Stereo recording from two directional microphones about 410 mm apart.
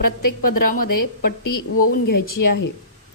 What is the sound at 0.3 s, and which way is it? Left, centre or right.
Speech, left.